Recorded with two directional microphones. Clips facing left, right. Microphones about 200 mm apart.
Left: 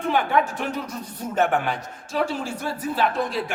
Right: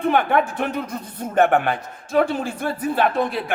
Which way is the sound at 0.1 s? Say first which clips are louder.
Right 1 dB; 55° right (ahead or behind).